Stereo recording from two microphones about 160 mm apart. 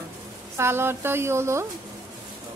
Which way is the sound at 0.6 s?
15° right (ahead or behind).